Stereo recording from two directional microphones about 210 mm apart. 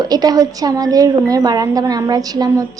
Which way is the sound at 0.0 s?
20° right (ahead or behind).